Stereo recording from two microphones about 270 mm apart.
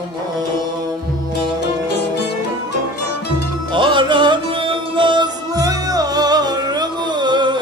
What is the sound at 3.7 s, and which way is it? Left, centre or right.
Music, centre.